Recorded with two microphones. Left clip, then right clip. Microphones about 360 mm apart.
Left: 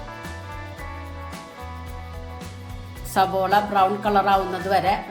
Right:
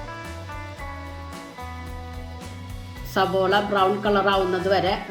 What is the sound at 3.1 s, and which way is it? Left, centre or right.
Speech, left.